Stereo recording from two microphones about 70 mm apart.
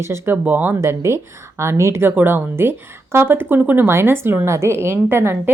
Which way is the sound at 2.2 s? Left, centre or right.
Right.